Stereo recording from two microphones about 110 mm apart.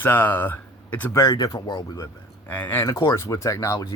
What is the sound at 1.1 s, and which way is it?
Speech, 35° left (ahead or behind).